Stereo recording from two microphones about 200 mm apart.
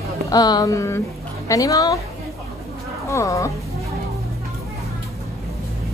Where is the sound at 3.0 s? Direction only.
15° left (ahead or behind).